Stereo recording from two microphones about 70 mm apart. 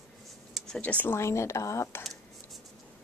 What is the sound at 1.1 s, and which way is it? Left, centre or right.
Speech, left.